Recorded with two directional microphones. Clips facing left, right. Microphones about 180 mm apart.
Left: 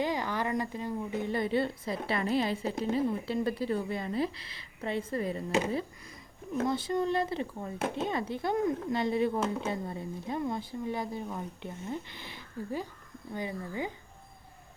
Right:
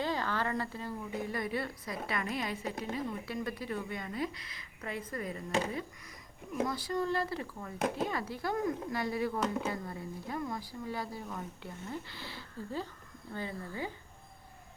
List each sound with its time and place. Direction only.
0.0 s a woman's voice: 15° left (ahead or behind)